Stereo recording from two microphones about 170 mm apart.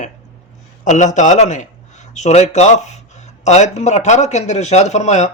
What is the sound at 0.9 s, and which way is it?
A man's voice, 45° left (ahead or behind).